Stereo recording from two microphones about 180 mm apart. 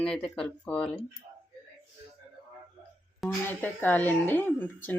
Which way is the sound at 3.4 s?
10° left (ahead or behind).